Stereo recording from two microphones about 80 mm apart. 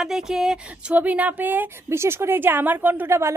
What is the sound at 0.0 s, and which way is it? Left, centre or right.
Speech, centre.